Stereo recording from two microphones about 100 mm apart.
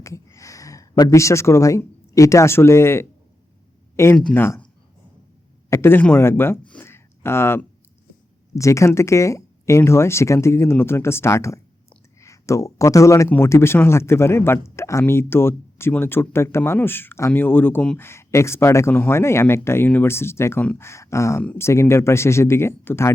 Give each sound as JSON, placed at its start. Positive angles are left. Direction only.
{"t": 0.0, "sound": "speech", "side_deg": 30}
{"t": 5.7, "sound": "speech", "side_deg": 25}
{"t": 6.8, "sound": "a sound", "side_deg": 25}
{"t": 8.5, "sound": "speech", "side_deg": 30}